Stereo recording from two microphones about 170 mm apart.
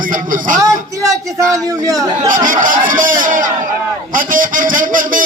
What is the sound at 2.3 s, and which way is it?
A man's voice, 50° right (ahead or behind).